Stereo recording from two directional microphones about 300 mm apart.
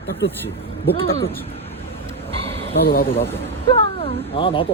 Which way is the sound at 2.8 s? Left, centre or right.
Left.